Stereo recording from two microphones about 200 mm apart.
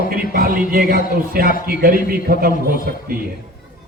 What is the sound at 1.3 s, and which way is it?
A man's voice, 45° right (ahead or behind).